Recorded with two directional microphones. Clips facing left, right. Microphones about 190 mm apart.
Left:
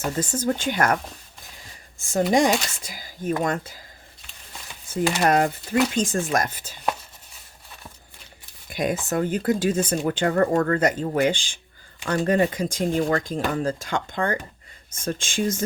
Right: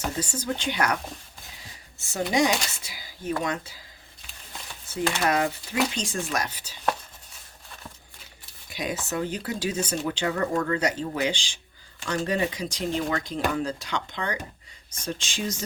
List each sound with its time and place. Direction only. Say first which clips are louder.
0.2 s speech: left 5 dB; 50° left (ahead or behind)
2.3 s speech: left 2 dB; 50° left (ahead or behind)
4.7 s a sound: left 4 dB; 10° left (ahead or behind)
5.2 s speech: left 5 dB; 50° left (ahead or behind)
8.7 s speech: left 6 dB; 50° left (ahead or behind)